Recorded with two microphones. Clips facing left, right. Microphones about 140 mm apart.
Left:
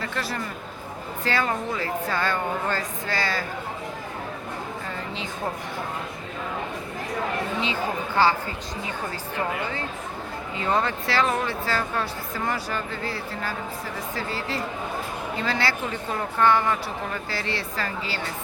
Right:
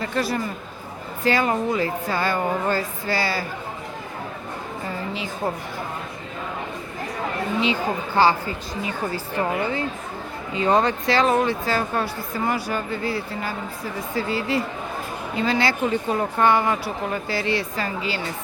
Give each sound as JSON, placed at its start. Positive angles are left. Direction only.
{"t": 1.2, "sound": "speech", "side_deg": -15}
{"t": 7.6, "sound": "speech", "side_deg": -15}